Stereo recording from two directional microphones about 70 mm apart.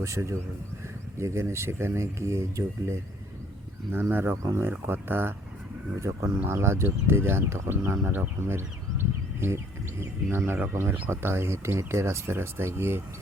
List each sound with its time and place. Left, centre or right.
0.0 s speech: right
4.1 s speech: right
6.0 s speech: right